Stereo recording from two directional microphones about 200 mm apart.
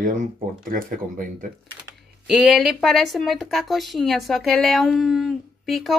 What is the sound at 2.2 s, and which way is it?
Speech, centre (ahead or behind).